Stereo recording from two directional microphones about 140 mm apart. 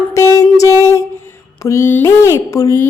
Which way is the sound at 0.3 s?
20° left (ahead or behind).